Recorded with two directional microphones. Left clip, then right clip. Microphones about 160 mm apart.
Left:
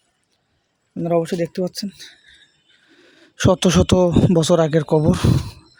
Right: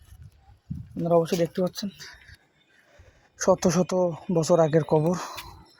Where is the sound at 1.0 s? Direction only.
55° left (ahead or behind).